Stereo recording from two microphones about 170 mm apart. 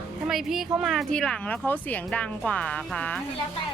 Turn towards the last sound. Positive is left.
turn(degrees=5)  # may be behind; listen again after turning